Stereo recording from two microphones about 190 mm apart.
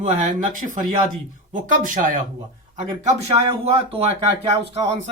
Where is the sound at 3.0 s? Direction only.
30° right (ahead or behind).